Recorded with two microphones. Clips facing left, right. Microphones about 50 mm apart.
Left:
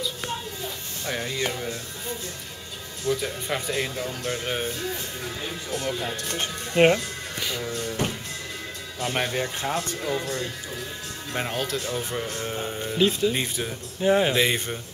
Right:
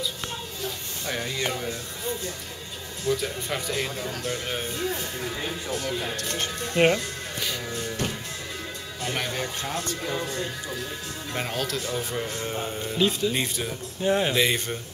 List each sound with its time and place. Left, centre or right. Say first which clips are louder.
1.0 s speech: left 1 dB; centre
3.1 s speech: left 1 dB; centre
4.2 s speech: left 3 dB; centre
4.7 s speech: right 2 dB; centre
6.1 s speech: even; centre
9.0 s speech: left 3 dB; centre
10.0 s speech: left 2 dB; centre
11.3 s speech: left 1 dB; centre